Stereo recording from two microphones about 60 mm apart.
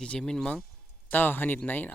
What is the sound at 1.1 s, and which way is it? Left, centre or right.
Speech, left.